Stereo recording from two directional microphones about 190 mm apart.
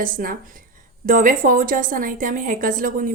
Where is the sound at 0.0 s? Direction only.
50° right (ahead or behind).